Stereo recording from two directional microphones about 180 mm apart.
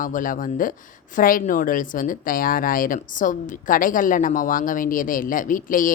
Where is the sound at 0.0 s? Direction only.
50° left (ahead or behind).